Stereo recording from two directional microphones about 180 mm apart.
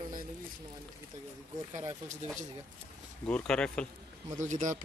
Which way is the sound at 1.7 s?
40° right (ahead or behind).